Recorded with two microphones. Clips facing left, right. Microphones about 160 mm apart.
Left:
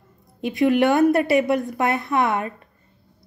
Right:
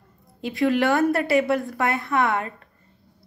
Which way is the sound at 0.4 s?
20° left (ahead or behind).